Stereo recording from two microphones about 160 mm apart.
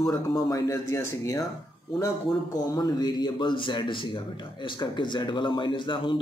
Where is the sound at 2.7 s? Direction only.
25° left (ahead or behind).